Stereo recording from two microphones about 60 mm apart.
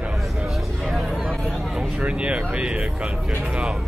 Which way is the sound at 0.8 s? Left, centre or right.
Centre.